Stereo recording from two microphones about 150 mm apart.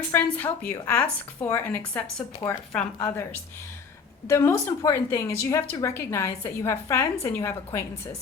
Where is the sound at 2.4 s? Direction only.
25° left (ahead or behind).